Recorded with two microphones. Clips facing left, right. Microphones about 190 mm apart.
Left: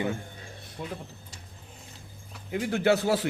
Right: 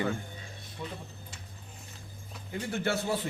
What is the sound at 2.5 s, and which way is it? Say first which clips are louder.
Speech: left 7 dB; 85° left.